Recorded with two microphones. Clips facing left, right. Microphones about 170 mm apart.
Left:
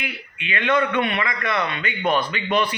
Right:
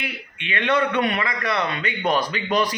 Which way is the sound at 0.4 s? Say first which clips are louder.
Even; 35° right (ahead or behind).